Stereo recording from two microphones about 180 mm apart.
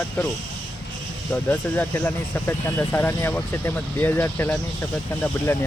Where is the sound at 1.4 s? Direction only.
10° left (ahead or behind).